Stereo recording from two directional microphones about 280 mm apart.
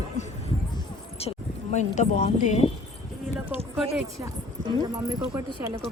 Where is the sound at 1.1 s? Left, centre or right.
Left.